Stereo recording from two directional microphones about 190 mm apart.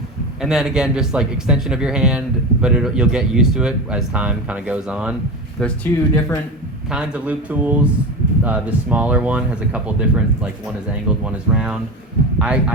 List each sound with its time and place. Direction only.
0.4 s speech: centre (ahead or behind)
5.5 s speech: 5° left (ahead or behind)
6.1 s speech: 15° left (ahead or behind)
6.9 s speech: 5° right (ahead or behind)